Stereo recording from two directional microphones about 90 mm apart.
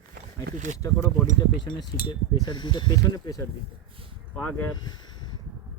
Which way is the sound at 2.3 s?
55° left (ahead or behind).